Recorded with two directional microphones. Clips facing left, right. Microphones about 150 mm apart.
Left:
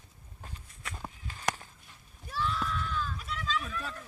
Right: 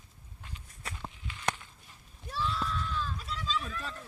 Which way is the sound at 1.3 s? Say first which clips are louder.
Even; 40° left (ahead or behind).